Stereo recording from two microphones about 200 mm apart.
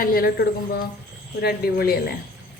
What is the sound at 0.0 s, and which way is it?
Speech, 50° left (ahead or behind).